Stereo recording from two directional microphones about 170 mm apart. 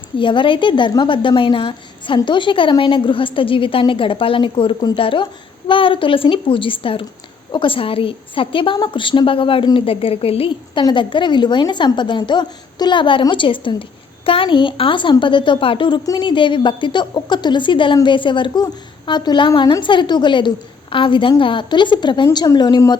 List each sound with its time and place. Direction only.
0.2 s a woman's voice: 30° left (ahead or behind)